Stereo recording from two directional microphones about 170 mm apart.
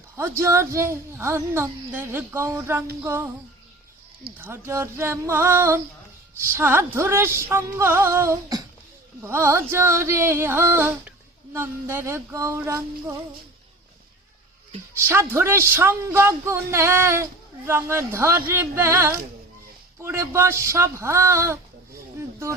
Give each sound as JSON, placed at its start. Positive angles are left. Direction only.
{"t": 0.2, "sound": "speech", "side_deg": -15}
{"t": 4.4, "sound": "speech", "side_deg": -15}
{"t": 15.0, "sound": "speech", "side_deg": -15}